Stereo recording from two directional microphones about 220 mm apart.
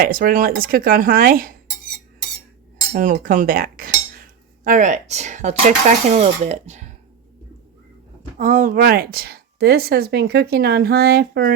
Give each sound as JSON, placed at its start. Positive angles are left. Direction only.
{"t": 0.0, "sound": "speech", "side_deg": -40}
{"t": 2.9, "sound": "cutlery", "side_deg": -35}
{"t": 6.1, "sound": "speech", "side_deg": -30}
{"t": 8.4, "sound": "a woman's voice", "side_deg": -35}